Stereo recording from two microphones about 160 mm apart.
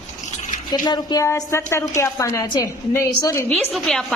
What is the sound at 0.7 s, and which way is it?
A woman's voice, 25° left (ahead or behind).